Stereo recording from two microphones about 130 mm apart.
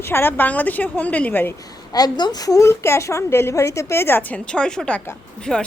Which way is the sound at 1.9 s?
30° left (ahead or behind).